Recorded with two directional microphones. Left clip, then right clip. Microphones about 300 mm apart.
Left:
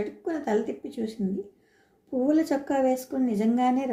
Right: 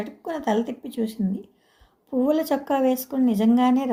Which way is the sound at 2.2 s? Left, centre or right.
Right.